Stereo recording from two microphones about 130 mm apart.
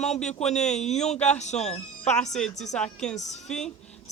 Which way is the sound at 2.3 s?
5° left (ahead or behind).